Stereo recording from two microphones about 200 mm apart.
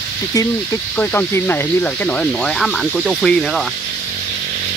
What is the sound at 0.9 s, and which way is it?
Speech, 10° left (ahead or behind).